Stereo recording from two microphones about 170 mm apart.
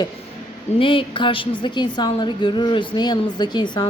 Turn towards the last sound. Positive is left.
turn(degrees=25)  # may be behind; listen again after turning